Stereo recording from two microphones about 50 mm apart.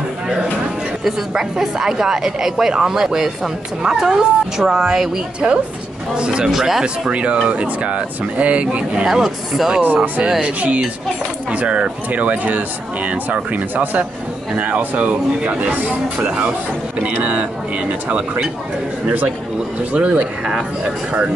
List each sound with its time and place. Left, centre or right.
1.0 s a woman's voice: centre
6.5 s a woman's voice: centre
7.1 s speech: right
9.0 s a woman's voice: centre
10.0 s speech: right